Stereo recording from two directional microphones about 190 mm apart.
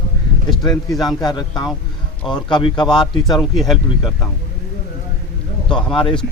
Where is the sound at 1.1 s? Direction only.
20° left (ahead or behind).